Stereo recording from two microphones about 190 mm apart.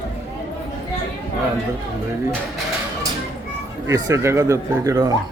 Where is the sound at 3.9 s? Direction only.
15° right (ahead or behind).